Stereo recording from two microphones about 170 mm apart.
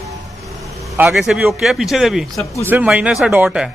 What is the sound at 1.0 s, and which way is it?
A man's voice, centre (ahead or behind).